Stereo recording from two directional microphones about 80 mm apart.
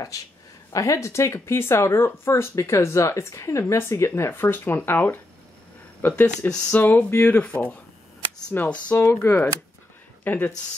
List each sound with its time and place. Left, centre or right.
0.7 s speech: left